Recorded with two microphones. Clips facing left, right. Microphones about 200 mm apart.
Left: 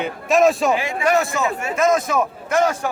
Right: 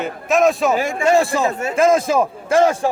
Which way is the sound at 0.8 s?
45° right (ahead or behind).